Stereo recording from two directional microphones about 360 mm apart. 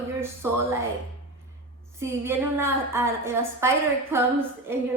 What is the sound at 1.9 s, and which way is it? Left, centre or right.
A woman's voice, centre.